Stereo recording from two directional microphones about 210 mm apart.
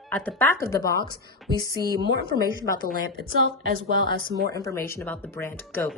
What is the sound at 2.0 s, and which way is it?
A woman's voice, 55° right (ahead or behind).